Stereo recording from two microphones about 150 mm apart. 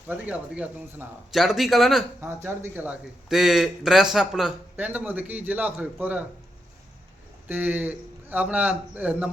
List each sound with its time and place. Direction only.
0.1 s a man's voice: 10° right (ahead or behind)
2.2 s speech: 15° right (ahead or behind)
7.4 s speech: 10° right (ahead or behind)